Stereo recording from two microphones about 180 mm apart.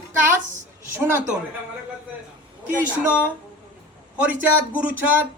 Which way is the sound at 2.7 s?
10° right (ahead or behind).